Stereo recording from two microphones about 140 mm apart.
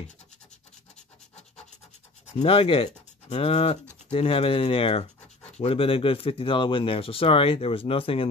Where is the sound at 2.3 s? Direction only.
40° left (ahead or behind).